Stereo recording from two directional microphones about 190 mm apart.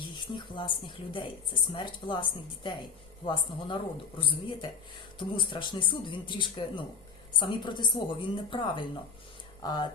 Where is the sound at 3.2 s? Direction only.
25° left (ahead or behind).